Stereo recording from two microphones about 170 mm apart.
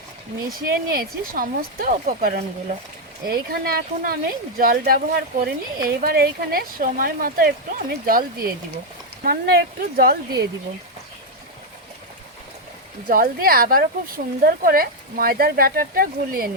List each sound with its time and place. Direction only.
0.6 s speech: 60° right (ahead or behind)
3.2 s speech: 60° right (ahead or behind)
13.1 s speech: 60° right (ahead or behind)